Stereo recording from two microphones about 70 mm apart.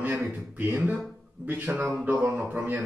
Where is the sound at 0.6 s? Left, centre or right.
Right.